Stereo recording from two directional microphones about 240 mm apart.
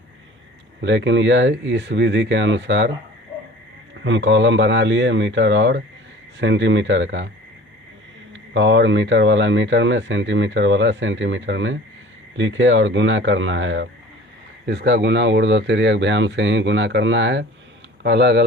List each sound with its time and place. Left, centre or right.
0.8 s speech: right
4.0 s speech: right
8.3 s speech: right